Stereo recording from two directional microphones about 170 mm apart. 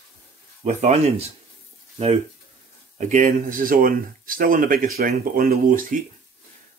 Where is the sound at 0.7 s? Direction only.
40° right (ahead or behind).